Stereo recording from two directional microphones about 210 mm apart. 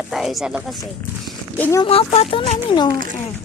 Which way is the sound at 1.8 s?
30° left (ahead or behind).